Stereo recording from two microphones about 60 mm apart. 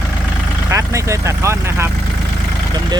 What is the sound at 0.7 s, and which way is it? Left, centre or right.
Vehicle, right.